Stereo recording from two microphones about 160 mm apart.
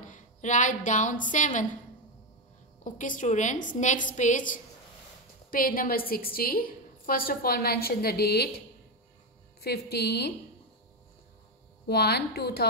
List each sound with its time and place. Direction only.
0.0 s a woman's voice: 50° left (ahead or behind)
2.8 s a woman's voice: 55° left (ahead or behind)
5.5 s a woman's voice: 65° left (ahead or behind); by 8.5 s 85° left
9.6 s a woman's voice: 85° left
11.9 s a woman's voice: 90° left